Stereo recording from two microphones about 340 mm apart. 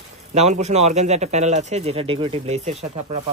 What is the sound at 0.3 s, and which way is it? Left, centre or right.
A man's voice, centre.